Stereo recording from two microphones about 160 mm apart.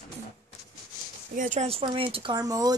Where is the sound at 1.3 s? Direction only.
50° right (ahead or behind).